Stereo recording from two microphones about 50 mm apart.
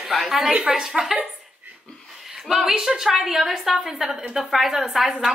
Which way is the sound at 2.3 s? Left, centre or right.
Centre.